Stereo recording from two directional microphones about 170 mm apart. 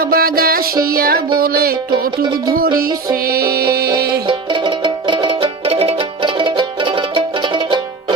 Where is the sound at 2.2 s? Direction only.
25° right (ahead or behind).